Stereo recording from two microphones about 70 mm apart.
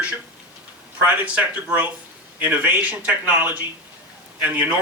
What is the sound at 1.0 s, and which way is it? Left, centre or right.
Speech, centre.